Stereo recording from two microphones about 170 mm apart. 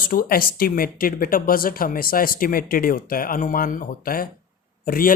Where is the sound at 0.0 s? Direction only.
55° left (ahead or behind).